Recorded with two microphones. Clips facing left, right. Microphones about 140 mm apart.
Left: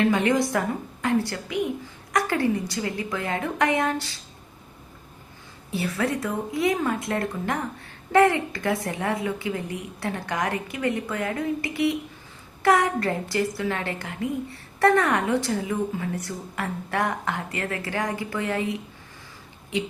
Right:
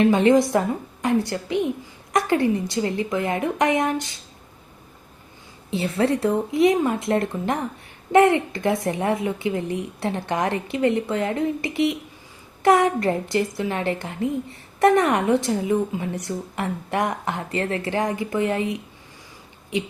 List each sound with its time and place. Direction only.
0.0 s a woman's voice: 20° right (ahead or behind)
5.7 s a woman's voice: 25° right (ahead or behind)